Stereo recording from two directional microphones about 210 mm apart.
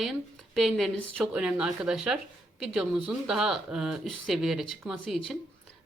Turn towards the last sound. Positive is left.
turn(degrees=0)  # may be behind; listen again after turning